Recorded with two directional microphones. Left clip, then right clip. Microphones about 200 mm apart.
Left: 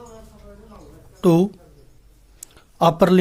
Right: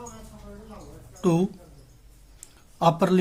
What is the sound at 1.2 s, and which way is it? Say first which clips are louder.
Speech: left 7 dB; 35° left (ahead or behind).